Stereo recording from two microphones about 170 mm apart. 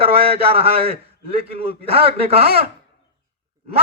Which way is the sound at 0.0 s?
35° right (ahead or behind).